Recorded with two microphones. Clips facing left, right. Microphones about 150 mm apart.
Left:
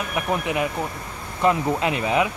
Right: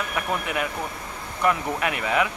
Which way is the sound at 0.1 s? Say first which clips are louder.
Left 6 dB; 20° left (ahead or behind).